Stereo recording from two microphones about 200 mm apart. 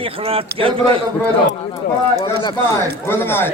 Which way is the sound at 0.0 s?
30° right (ahead or behind).